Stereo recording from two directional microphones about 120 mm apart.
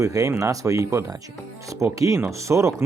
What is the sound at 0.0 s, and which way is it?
Speech, 25° right (ahead or behind).